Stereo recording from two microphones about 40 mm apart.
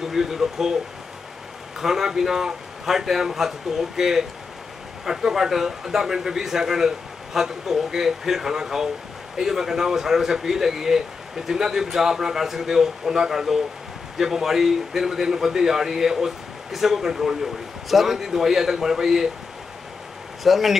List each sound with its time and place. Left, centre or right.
0.1 s speech: centre
1.8 s speech: centre
20.4 s speech: centre